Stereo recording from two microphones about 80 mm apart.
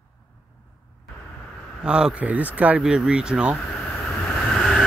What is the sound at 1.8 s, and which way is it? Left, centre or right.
Speech, centre.